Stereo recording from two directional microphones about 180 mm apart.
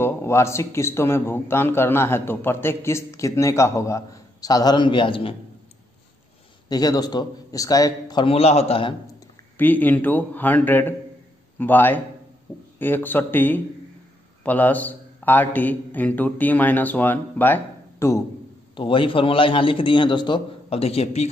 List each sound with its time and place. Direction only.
0.0 s a man's voice: 15° left (ahead or behind)
6.7 s a man's voice: 20° left (ahead or behind)
9.6 s a man's voice: 10° left (ahead or behind)
18.8 s a man's voice: 30° left (ahead or behind)